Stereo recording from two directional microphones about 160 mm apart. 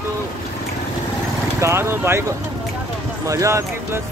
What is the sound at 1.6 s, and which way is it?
Speech, 15° right (ahead or behind).